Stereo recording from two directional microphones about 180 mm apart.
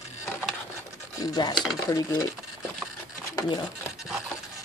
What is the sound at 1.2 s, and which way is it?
Speech, 20° left (ahead or behind).